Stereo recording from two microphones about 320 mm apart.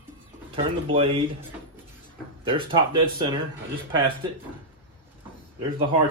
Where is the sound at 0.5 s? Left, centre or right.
Centre.